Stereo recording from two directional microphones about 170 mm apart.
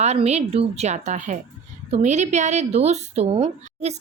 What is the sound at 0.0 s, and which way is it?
Speech, 40° right (ahead or behind).